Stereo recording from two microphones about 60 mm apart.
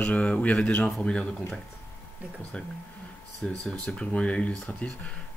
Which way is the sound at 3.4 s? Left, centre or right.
Centre.